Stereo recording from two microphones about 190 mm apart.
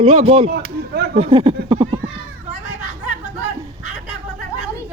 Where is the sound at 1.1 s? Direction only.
30° right (ahead or behind).